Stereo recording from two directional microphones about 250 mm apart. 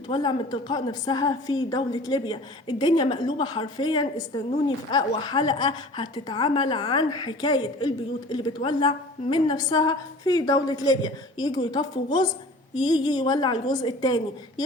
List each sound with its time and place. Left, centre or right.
0.1 s a woman's voice: centre